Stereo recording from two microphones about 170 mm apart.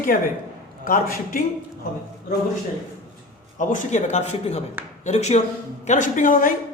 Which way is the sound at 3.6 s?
50° left (ahead or behind).